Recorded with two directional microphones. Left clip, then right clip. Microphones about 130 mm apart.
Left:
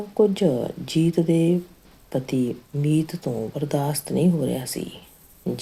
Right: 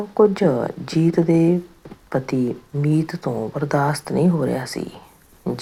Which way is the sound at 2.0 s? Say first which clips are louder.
Right 4 dB; 5° left (ahead or behind).